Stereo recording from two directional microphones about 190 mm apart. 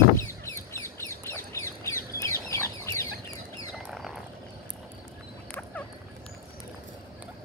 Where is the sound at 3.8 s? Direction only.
Centre (ahead or behind).